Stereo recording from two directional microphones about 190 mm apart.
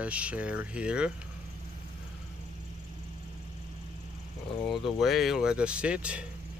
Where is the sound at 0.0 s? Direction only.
5° right (ahead or behind).